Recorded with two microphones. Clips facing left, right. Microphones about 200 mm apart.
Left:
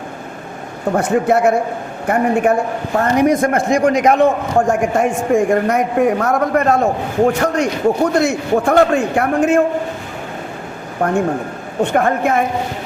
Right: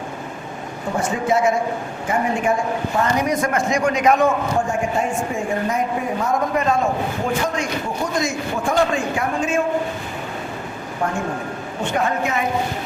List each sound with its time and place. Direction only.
0.9 s a man's voice: 60° left (ahead or behind)
11.0 s a man's voice: 60° left (ahead or behind)